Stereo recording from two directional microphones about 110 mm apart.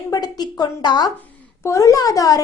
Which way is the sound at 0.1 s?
35° left (ahead or behind).